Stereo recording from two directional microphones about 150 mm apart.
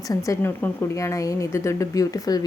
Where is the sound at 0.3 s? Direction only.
15° left (ahead or behind).